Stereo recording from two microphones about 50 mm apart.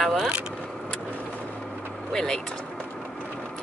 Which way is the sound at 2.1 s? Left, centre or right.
Centre.